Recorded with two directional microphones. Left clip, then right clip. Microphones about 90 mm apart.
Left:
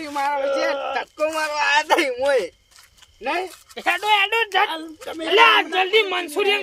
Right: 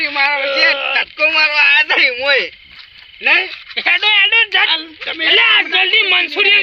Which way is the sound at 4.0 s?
15° left (ahead or behind).